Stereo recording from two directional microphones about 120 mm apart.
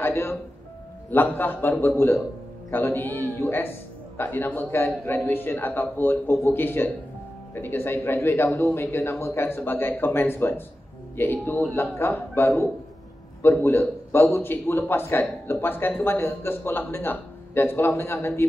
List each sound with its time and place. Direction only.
0.0 s a man's voice: 20° left (ahead or behind)